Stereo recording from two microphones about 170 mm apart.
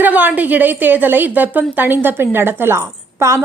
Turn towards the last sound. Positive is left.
turn(degrees=-15)  # may be behind; listen again after turning